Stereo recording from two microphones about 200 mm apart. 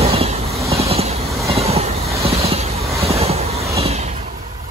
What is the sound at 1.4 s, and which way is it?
Train, 30° right (ahead or behind).